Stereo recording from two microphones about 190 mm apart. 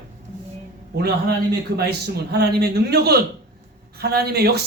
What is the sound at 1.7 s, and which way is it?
A man's voice, 60° right (ahead or behind).